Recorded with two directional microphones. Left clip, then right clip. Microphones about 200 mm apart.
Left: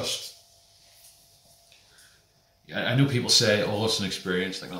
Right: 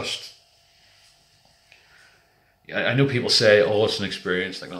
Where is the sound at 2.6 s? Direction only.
5° left (ahead or behind).